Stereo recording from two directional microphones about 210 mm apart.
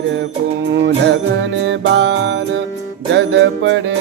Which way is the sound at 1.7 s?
55° right (ahead or behind).